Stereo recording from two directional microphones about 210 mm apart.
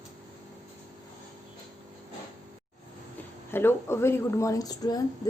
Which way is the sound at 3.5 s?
10° left (ahead or behind).